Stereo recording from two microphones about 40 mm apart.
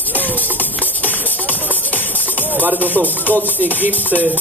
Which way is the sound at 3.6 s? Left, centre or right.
Right.